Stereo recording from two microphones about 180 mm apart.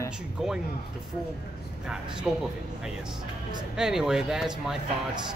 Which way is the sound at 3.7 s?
Centre (ahead or behind).